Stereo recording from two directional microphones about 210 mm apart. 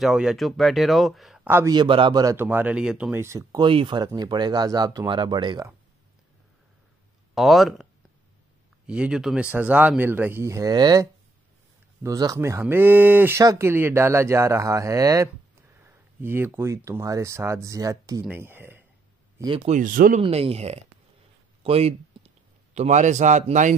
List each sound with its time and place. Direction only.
0.0 s speech: centre (ahead or behind); by 5.7 s 20° right (ahead or behind)
7.3 s speech: centre (ahead or behind); by 18.2 s 15° right (ahead or behind)
18.2 s a sound: 10° right (ahead or behind)
19.3 s a man's voice: 20° right (ahead or behind); by 20.2 s 40° right (ahead or behind)
20.2 s speech: 30° right (ahead or behind)
21.6 s a sound: 30° right (ahead or behind)
22.8 s a man's voice: 35° right (ahead or behind)